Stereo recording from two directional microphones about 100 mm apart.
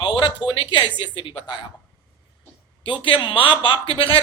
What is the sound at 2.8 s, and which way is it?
Speech, 55° left (ahead or behind).